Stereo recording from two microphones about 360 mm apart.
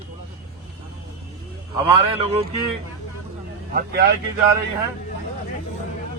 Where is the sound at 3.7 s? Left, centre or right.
Right.